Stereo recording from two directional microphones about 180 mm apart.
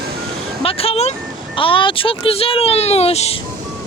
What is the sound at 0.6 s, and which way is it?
Speech, 30° left (ahead or behind).